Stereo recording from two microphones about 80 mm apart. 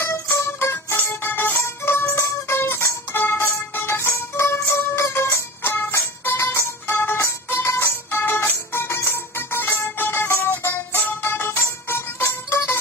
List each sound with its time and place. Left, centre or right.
0.0 s music: left